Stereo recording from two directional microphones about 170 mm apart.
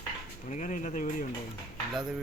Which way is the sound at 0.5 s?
45° left (ahead or behind).